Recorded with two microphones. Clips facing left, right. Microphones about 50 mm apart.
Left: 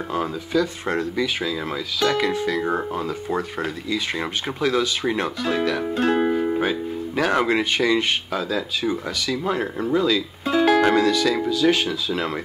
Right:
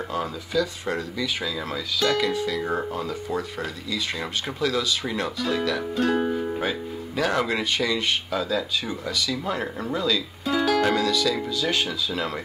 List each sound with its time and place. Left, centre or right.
0.5 s speech: left
1.4 s speech: centre
2.0 s speech: left
2.6 s speech: centre
3.3 s speech: left
6.5 s speech: centre
8.3 s speech: centre
8.8 s speech: left
9.4 s speech: centre
10.4 s music: left
11.0 s speech: left